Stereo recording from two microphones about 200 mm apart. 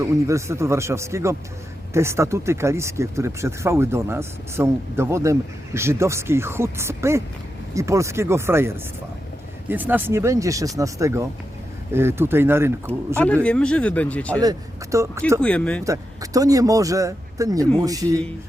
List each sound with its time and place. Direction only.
0.0 s speech: 15° right (ahead or behind)
13.1 s speech: 5° left (ahead or behind)
14.4 s speech: 15° right (ahead or behind)
15.4 s speech: 5° left (ahead or behind)
15.8 s speech: 15° right (ahead or behind)